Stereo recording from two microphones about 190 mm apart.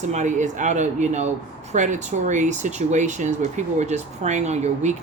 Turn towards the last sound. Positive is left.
turn(degrees=-35)  # may be behind; listen again after turning